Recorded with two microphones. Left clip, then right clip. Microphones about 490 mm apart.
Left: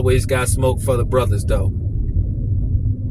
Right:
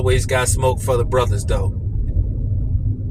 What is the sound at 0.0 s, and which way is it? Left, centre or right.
Speech, left.